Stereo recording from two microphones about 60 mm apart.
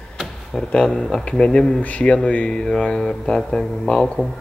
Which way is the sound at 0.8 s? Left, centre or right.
Centre.